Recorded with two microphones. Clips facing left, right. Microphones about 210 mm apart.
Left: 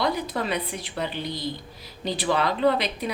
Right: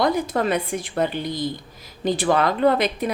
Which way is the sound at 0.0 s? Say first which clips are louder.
Right 5 dB; 50° right (ahead or behind).